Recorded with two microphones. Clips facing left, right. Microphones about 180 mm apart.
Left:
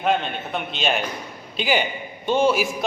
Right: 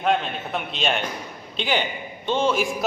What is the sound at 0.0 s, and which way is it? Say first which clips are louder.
A man's voice: even; centre (ahead or behind).